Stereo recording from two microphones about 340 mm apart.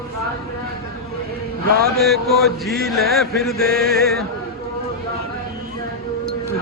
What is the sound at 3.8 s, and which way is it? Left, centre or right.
Mantra, right.